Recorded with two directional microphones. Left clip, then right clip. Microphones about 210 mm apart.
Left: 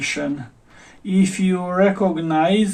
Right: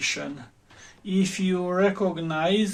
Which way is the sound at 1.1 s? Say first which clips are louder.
Left 5 dB; 50° right (ahead or behind).